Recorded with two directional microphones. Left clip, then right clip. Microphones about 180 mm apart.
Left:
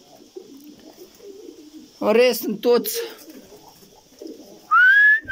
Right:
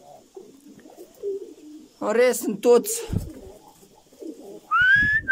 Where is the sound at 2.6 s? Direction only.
15° right (ahead or behind).